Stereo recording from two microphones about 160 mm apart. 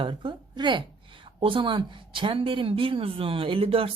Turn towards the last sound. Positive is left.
turn(degrees=-35)  # may be behind; listen again after turning